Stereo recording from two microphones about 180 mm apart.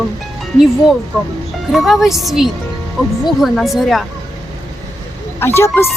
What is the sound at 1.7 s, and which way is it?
A woman's voice, centre (ahead or behind).